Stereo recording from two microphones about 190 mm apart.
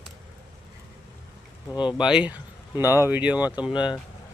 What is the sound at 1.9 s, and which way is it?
Speech, 5° right (ahead or behind).